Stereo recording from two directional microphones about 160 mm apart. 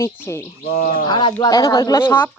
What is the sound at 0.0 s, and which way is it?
Speech, 15° left (ahead or behind).